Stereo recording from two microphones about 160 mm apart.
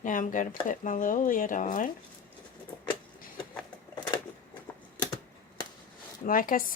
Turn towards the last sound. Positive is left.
turn(degrees=60)  # may be behind; listen again after turning